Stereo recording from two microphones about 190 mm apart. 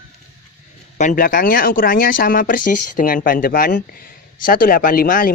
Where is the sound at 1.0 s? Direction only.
45° left (ahead or behind).